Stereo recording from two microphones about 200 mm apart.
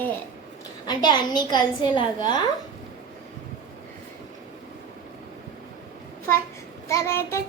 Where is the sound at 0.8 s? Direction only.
20° left (ahead or behind).